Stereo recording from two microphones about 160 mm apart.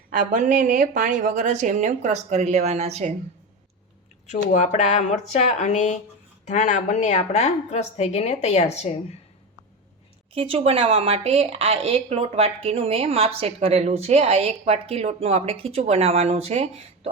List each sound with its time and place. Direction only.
0.1 s a woman's voice: 50° right (ahead or behind)
4.3 s a woman's voice: 45° left (ahead or behind)
10.3 s speech: 35° right (ahead or behind)